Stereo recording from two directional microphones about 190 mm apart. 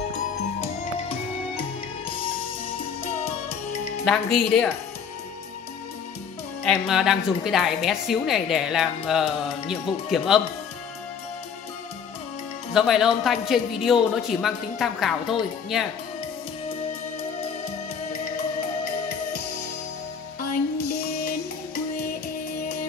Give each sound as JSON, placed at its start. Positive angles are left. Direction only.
{"t": 1.6, "sound": "music", "side_deg": 30}
{"t": 4.0, "sound": "a woman's voice", "side_deg": 5}
{"t": 6.6, "sound": "a woman's voice", "side_deg": 0}
{"t": 12.7, "sound": "a woman's voice", "side_deg": 0}